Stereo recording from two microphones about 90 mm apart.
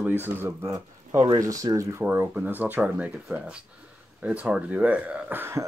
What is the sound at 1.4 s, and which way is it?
Speech, 40° right (ahead or behind).